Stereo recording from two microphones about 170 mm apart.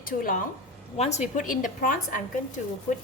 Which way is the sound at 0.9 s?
40° left (ahead or behind).